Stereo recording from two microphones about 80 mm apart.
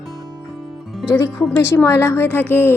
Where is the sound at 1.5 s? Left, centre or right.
Left.